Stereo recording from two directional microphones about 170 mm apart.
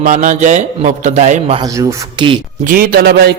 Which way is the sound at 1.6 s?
20° right (ahead or behind).